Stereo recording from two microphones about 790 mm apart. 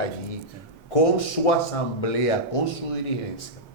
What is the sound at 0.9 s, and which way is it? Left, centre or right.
Speech, left.